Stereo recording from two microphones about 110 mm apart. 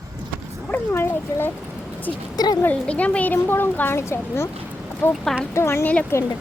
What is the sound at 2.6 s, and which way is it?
Speech, 15° left (ahead or behind).